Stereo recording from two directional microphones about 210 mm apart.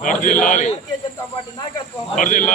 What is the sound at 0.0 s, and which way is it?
Speech, 40° left (ahead or behind).